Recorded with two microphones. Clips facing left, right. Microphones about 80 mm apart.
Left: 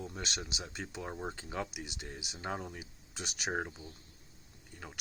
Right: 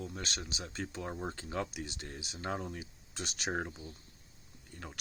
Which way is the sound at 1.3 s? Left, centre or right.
Centre.